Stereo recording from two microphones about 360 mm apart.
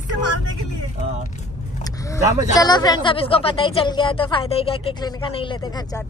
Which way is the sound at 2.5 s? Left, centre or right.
Centre.